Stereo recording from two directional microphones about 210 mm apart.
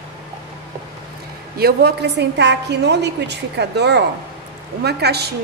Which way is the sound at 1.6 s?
50° right (ahead or behind).